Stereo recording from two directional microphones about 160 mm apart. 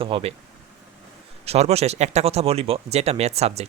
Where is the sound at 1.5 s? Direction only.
40° right (ahead or behind).